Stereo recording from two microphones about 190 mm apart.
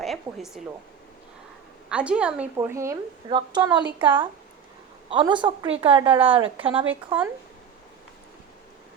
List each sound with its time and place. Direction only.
0.0 s speech: centre (ahead or behind)
1.9 s a woman's voice: 5° right (ahead or behind); by 6.8 s 30° right (ahead or behind)
6.8 s a woman's voice: 10° right (ahead or behind)